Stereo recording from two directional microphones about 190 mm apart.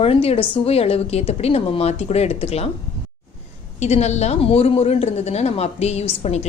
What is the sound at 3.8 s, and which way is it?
A woman's voice, 35° left (ahead or behind).